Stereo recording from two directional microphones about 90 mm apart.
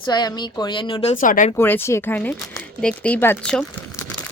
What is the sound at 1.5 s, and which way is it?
Speech, 25° left (ahead or behind).